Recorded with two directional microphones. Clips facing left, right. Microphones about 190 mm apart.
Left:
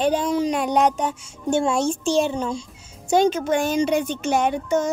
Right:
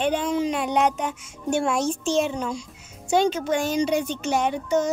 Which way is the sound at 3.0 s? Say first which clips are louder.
Left 3 dB; 45° left (ahead or behind).